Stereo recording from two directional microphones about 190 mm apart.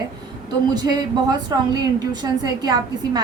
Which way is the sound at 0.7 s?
20° right (ahead or behind).